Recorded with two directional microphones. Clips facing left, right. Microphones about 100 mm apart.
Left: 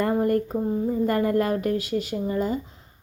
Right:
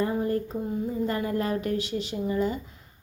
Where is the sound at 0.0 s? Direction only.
55° left (ahead or behind).